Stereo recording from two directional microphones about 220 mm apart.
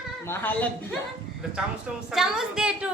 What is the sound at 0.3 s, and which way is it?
Speech, 10° left (ahead or behind).